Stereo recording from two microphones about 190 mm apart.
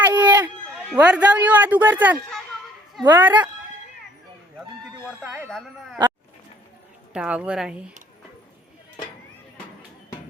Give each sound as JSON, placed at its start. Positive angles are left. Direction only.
{"t": 0.0, "sound": "a sound", "side_deg": -10}
{"t": 0.9, "sound": "speech", "side_deg": -5}
{"t": 5.2, "sound": "speech", "side_deg": -5}
{"t": 7.1, "sound": "speech", "side_deg": -5}